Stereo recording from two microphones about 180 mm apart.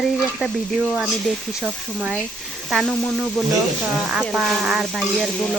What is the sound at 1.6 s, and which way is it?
Stir, 5° right (ahead or behind).